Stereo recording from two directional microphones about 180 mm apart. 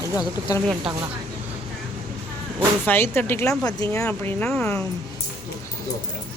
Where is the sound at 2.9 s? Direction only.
10° left (ahead or behind).